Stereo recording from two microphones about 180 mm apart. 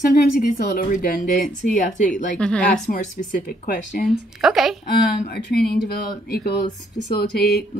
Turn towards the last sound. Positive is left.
turn(degrees=60)  # may be behind; listen again after turning